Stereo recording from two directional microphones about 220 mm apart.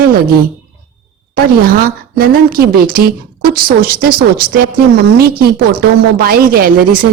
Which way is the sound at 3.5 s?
40° right (ahead or behind).